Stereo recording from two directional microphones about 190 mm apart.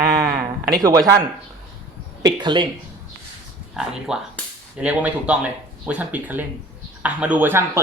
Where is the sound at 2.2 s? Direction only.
25° right (ahead or behind).